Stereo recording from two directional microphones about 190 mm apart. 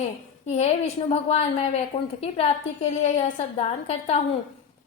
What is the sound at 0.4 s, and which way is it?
A woman's voice, 35° left (ahead or behind).